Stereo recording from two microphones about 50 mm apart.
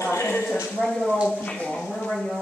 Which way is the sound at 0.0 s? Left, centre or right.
Left.